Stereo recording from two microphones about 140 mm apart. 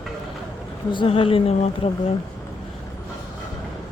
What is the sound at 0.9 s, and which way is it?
Speech, 35° left (ahead or behind).